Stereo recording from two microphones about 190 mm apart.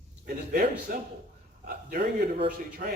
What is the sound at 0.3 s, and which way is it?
A man's voice, 50° right (ahead or behind).